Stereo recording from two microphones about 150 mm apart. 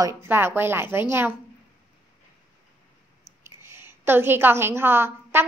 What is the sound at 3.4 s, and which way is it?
A woman's voice, 15° right (ahead or behind).